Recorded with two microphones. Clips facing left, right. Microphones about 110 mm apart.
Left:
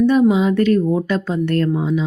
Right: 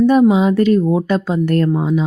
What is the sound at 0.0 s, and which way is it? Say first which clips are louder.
Speech: right 2 dB; 40° right (ahead or behind).